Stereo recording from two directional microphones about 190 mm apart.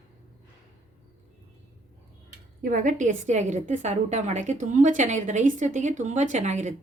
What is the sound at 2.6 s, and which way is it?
A woman's voice, 45° right (ahead or behind).